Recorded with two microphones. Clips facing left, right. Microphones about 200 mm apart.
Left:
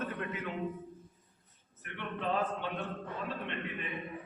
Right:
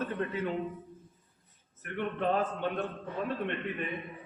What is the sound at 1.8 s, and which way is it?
A man's voice, 45° right (ahead or behind).